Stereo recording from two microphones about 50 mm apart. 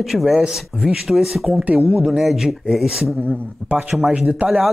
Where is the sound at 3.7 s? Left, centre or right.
Right.